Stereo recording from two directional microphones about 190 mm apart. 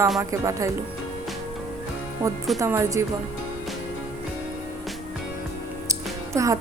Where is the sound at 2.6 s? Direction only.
15° right (ahead or behind).